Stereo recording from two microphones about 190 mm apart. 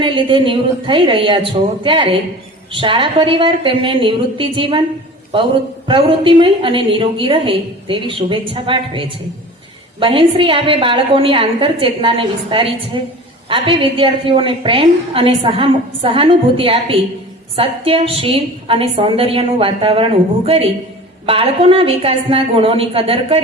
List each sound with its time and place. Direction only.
0.0 s a woman's voice: 25° right (ahead or behind)
5.9 s a woman's voice: 25° right (ahead or behind)
21.2 s a woman's voice: 30° right (ahead or behind)